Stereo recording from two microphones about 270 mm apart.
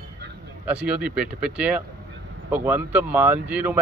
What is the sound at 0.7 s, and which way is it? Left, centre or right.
Speech, centre.